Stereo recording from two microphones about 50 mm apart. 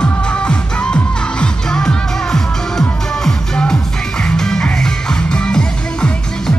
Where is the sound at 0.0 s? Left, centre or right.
Left.